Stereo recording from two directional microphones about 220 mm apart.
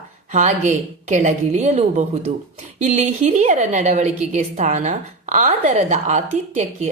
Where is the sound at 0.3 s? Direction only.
30° right (ahead or behind).